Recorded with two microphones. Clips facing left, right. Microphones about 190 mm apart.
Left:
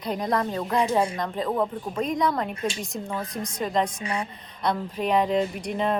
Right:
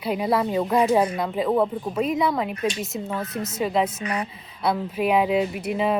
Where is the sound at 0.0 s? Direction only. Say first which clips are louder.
Right 3 dB; 5° right (ahead or behind).